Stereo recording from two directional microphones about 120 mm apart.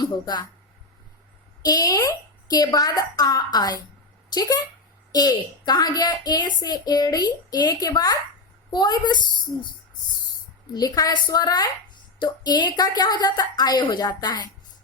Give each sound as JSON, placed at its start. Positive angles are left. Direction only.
{"t": 0.0, "sound": "speech", "side_deg": 35}
{"t": 1.6, "sound": "a woman's voice", "side_deg": 30}
{"t": 10.8, "sound": "a woman's voice", "side_deg": 35}